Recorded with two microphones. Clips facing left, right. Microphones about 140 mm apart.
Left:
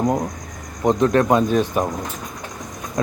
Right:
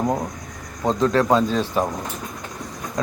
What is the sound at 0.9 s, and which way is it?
Speech, 20° left (ahead or behind).